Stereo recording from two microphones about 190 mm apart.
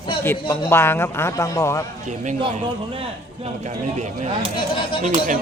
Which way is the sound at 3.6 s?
35° right (ahead or behind).